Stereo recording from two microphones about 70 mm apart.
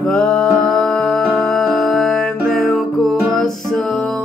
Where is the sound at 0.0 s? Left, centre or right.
Centre.